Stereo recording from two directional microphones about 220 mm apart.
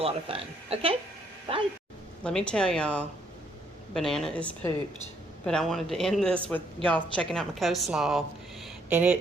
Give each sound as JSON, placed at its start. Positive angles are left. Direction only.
{"t": 0.0, "sound": "a woman's voice", "side_deg": -25}
{"t": 2.2, "sound": "a woman's voice", "side_deg": 5}
{"t": 8.6, "sound": "a sound", "side_deg": -10}